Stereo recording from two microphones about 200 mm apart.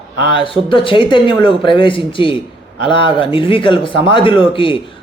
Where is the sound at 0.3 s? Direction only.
25° left (ahead or behind).